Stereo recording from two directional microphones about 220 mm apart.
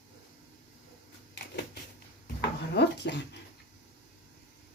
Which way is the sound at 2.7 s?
50° left (ahead or behind).